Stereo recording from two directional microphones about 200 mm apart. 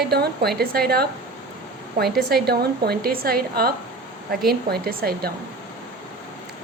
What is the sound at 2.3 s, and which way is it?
A woman's voice, 50° right (ahead or behind).